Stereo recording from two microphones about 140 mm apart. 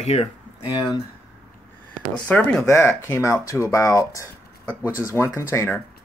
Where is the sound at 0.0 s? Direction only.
50° left (ahead or behind).